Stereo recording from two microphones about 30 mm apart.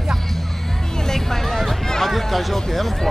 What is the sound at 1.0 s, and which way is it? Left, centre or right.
Music, centre.